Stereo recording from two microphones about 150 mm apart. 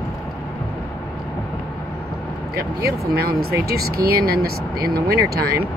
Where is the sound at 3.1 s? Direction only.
90° right.